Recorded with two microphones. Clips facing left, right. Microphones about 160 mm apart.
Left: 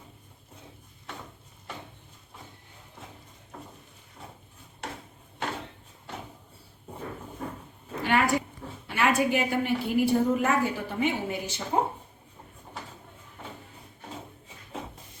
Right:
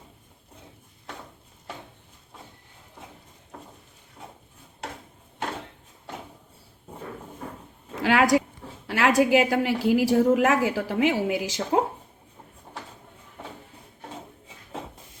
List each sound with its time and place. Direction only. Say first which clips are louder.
8.0 s a woman's voice: right 5 dB; 90° right